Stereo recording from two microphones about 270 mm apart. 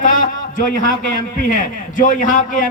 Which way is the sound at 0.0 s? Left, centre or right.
Left.